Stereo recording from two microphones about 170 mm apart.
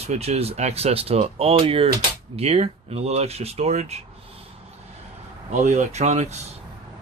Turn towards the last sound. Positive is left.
turn(degrees=-40)  # may be behind; listen again after turning